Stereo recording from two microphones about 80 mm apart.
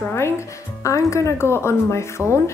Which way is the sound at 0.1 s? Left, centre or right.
Left.